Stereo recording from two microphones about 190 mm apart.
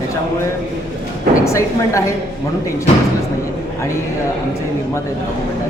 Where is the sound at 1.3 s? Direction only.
15° left (ahead or behind).